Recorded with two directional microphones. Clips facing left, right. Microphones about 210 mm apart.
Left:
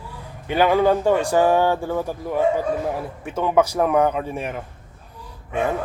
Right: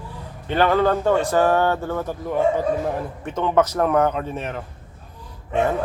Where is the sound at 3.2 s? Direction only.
10° left (ahead or behind).